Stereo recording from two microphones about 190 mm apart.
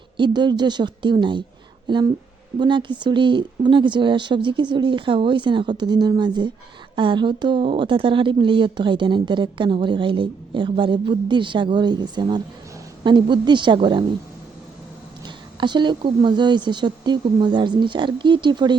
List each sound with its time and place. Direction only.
0.2 s a woman's voice: 25° right (ahead or behind)
15.6 s a woman's voice: 25° right (ahead or behind)